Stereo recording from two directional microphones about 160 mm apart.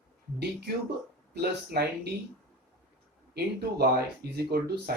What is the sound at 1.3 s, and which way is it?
Speech, 90° right.